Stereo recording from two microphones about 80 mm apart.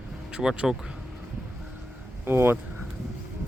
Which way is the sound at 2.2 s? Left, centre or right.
Right.